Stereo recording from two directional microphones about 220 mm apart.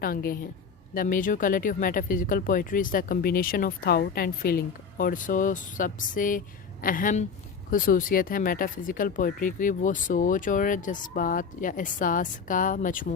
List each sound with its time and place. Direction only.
0.0 s speech: 40° left (ahead or behind)